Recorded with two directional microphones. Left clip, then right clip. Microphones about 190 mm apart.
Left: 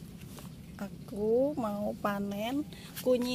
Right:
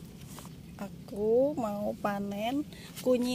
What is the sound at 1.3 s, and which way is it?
Speech, centre (ahead or behind).